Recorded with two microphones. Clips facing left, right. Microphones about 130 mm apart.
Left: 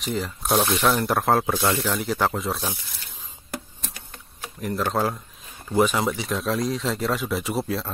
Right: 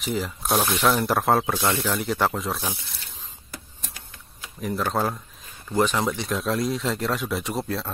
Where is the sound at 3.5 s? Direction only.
75° left (ahead or behind).